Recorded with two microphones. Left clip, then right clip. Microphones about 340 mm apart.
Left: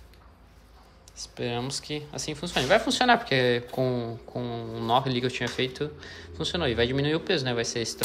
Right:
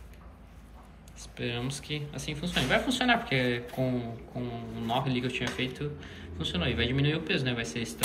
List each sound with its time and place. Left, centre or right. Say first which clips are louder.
1.3 s speech: left 4 dB; centre